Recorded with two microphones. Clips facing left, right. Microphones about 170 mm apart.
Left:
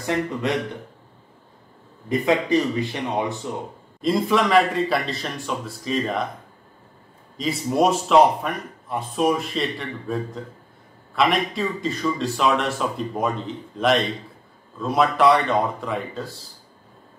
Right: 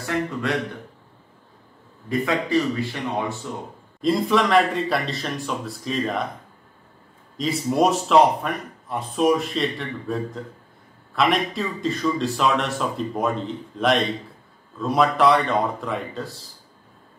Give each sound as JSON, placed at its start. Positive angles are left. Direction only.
{"t": 0.0, "sound": "speech", "side_deg": 20}
{"t": 2.0, "sound": "speech", "side_deg": 20}
{"t": 4.0, "sound": "speech", "side_deg": 0}
{"t": 7.3, "sound": "speech", "side_deg": 0}